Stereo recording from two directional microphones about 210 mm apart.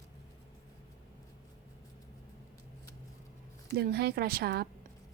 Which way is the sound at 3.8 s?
50° right (ahead or behind).